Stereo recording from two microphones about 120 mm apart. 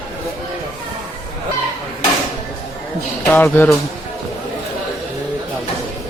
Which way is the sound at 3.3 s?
15° left (ahead or behind).